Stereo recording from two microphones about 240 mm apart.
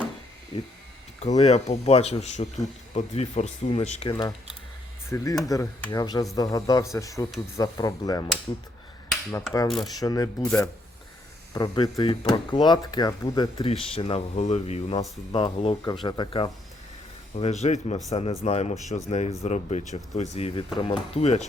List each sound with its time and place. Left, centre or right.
0.5 s speech: left
5.0 s speech: centre
9.6 s mechanisms: centre
10.0 s speech: centre